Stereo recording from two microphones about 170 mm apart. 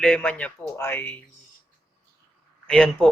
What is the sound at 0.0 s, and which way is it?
Speech, 5° left (ahead or behind).